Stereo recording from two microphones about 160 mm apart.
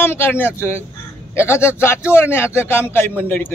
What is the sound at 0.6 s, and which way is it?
A man's voice, 15° left (ahead or behind).